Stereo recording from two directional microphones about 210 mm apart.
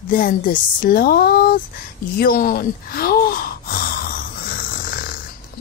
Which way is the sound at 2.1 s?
45° left (ahead or behind).